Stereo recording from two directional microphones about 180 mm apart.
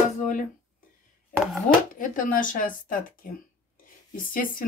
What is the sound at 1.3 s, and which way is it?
Chopping, 15° right (ahead or behind).